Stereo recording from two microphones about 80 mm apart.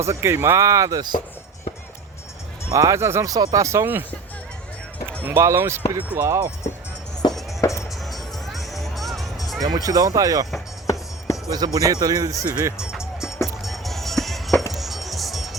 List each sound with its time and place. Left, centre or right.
0.0 s speech: right
2.7 s speech: right
3.3 s speech: right
5.2 s speech: right
7.6 s music: left
7.9 s music: centre
9.6 s speech: right
10.8 s music: left
11.5 s speech: right
12.7 s music: centre